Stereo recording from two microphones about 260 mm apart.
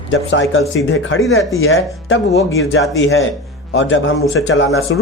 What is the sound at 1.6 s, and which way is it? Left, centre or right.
Speech, left.